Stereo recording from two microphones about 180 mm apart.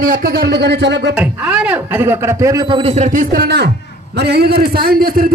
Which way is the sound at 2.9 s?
45° right (ahead or behind).